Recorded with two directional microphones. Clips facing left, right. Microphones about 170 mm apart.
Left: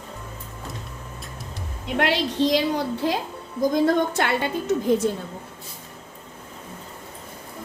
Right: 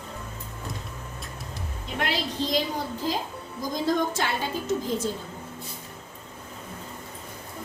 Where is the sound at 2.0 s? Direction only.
75° left (ahead or behind).